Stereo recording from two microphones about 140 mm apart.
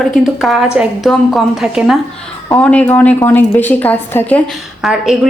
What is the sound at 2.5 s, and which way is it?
A woman's voice, 10° left (ahead or behind).